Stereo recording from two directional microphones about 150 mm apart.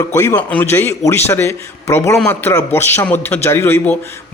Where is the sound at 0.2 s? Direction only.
20° left (ahead or behind).